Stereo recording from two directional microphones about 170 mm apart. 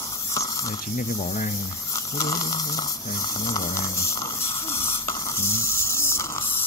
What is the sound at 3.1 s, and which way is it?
Snoring, 20° left (ahead or behind).